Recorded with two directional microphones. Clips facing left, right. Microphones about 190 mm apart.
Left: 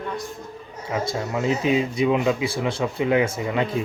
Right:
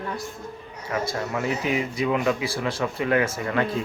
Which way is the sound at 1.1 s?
20° left (ahead or behind).